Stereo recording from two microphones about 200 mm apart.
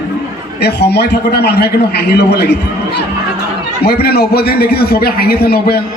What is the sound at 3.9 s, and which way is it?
A man's voice, 50° left (ahead or behind).